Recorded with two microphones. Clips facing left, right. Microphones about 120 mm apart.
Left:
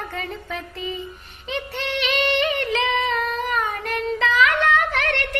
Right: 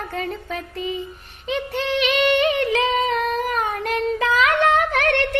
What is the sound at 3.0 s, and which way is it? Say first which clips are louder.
Child singing: right 3 dB; 45° right (ahead or behind).